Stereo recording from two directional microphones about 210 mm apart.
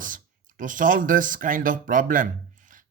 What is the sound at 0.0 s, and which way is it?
A man's voice, 40° right (ahead or behind).